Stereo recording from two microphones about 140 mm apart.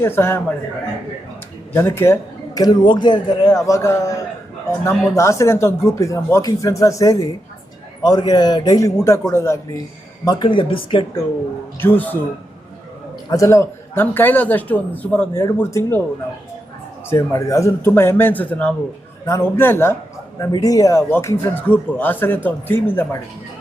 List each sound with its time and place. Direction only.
0.0 s a man's voice: 15° left (ahead or behind)
1.7 s a man's voice: 15° left (ahead or behind)
2.6 s a man's voice: 30° left (ahead or behind)
3.7 s speech: 20° left (ahead or behind)
10.2 s a man's voice: 30° left (ahead or behind)
11.8 s a man's voice: 15° left (ahead or behind)
13.3 s a man's voice: 20° left (ahead or behind)
17.1 s a man's voice: 20° left (ahead or behind)